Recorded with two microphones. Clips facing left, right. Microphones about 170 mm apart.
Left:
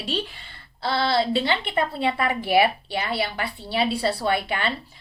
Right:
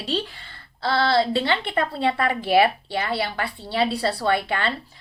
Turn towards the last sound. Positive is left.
turn(degrees=15)  # may be behind; listen again after turning